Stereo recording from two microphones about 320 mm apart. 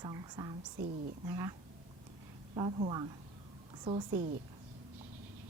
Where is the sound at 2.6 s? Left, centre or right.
Centre.